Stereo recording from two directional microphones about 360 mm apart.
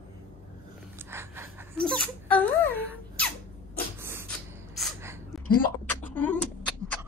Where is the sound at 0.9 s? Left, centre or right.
Centre.